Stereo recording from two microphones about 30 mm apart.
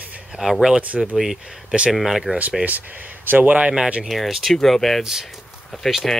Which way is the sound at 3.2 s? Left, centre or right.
Right.